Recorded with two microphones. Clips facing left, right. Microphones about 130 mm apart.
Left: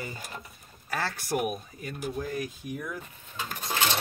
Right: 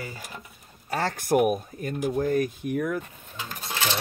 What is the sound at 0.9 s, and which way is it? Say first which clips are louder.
Speech: right 7 dB; 45° right (ahead or behind).